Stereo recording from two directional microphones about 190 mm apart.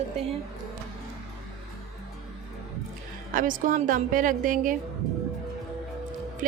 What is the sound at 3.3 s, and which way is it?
A woman's voice, 45° right (ahead or behind).